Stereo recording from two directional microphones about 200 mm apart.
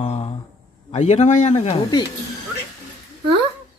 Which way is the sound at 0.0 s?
35° left (ahead or behind).